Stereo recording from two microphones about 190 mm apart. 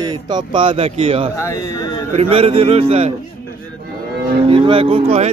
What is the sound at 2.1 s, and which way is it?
Speech, 30° right (ahead or behind).